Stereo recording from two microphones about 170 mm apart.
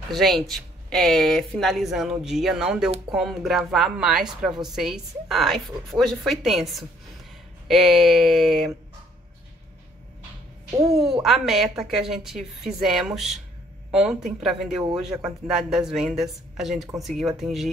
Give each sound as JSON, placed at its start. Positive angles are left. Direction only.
{"t": 0.1, "sound": "a woman's voice", "side_deg": 0}
{"t": 11.2, "sound": "a woman's voice", "side_deg": 0}